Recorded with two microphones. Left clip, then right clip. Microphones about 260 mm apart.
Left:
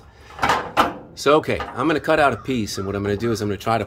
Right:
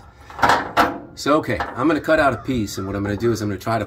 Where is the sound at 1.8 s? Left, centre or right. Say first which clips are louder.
Right 1 dB; centre.